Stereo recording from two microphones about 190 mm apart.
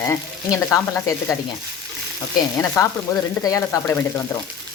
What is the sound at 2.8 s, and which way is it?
Frying, 15° left (ahead or behind).